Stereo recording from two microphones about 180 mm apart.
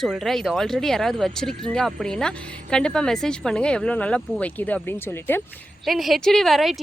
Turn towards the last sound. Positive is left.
turn(degrees=0)  # may be behind; listen again after turning